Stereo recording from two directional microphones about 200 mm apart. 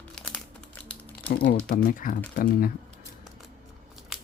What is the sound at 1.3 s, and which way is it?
Speech, 50° left (ahead or behind).